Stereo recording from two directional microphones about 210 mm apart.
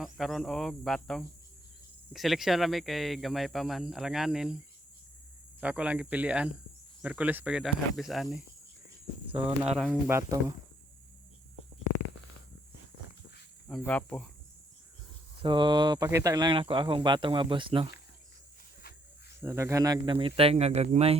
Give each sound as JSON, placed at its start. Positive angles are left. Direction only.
{"t": 0.0, "sound": "speech", "side_deg": 0}
{"t": 5.5, "sound": "speech", "side_deg": -5}
{"t": 9.7, "sound": "speech", "side_deg": 0}
{"t": 10.1, "sound": "speech", "side_deg": -15}
{"t": 13.7, "sound": "speech", "side_deg": 5}
{"t": 15.4, "sound": "speech", "side_deg": -20}
{"t": 19.4, "sound": "speech", "side_deg": -10}